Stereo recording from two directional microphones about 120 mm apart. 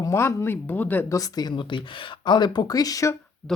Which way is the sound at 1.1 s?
35° left (ahead or behind).